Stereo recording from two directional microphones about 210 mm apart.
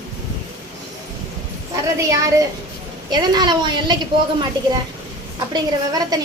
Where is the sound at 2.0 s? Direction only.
15° right (ahead or behind).